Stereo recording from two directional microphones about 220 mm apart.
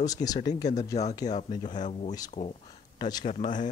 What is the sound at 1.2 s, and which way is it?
Speech, 35° left (ahead or behind).